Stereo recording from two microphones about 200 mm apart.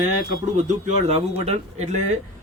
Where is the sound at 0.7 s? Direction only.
30° right (ahead or behind).